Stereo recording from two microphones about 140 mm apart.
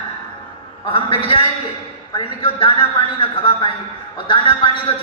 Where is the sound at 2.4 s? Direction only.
40° left (ahead or behind).